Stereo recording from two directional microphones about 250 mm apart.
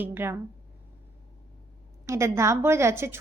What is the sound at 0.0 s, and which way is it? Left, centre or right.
Speech, centre.